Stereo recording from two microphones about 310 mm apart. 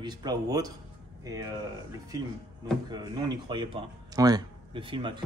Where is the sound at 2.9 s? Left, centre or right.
Centre.